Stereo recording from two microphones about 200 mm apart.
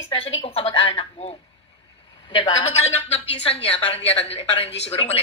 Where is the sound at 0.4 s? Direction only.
30° left (ahead or behind).